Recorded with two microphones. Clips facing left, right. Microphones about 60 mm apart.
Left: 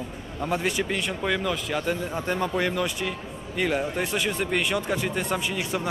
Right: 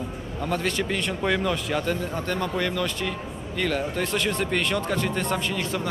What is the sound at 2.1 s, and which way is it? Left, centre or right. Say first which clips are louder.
A man's voice: left 1 dB; centre.